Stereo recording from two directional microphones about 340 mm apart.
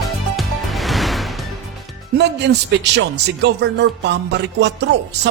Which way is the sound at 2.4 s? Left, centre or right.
Right.